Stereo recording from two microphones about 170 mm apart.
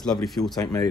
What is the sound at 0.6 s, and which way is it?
Speech, 20° left (ahead or behind).